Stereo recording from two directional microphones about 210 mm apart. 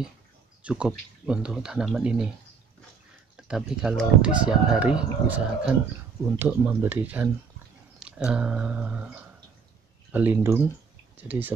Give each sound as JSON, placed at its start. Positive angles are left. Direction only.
{"t": 0.6, "sound": "speech", "side_deg": -5}
{"t": 3.3, "sound": "speech", "side_deg": -5}